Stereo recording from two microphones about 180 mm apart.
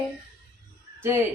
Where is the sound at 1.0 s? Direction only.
15° right (ahead or behind).